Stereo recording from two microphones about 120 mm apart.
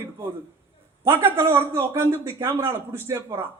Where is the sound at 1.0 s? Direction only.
20° right (ahead or behind).